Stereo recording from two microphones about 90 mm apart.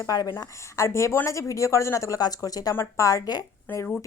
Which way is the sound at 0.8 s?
35° left (ahead or behind).